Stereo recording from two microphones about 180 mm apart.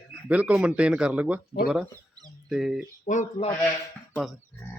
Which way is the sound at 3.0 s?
45° left (ahead or behind).